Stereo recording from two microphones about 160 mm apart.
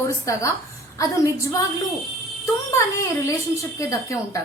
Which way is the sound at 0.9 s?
20° left (ahead or behind).